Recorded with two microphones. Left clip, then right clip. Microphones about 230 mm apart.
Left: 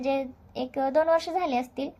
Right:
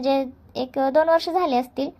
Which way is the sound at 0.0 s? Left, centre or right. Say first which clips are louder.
Right 6 dB; right.